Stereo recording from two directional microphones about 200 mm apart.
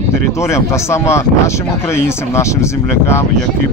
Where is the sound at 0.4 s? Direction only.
15° left (ahead or behind).